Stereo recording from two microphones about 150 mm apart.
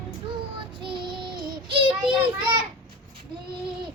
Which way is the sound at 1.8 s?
30° right (ahead or behind).